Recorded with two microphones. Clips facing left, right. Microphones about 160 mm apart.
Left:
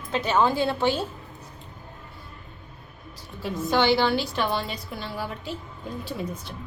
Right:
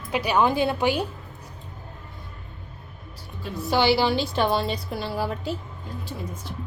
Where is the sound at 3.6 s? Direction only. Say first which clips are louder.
Right 1 dB; 10° right (ahead or behind).